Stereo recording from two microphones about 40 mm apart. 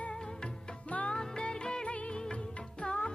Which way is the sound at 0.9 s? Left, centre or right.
Left.